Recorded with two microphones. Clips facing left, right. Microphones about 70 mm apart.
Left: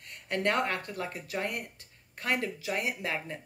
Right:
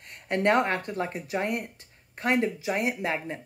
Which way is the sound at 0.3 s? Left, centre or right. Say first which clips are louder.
Right 6 dB; right.